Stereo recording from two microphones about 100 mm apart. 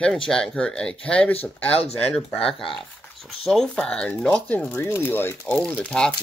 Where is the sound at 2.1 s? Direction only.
5° left (ahead or behind).